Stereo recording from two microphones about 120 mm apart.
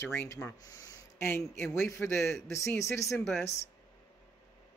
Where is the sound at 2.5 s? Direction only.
25° left (ahead or behind).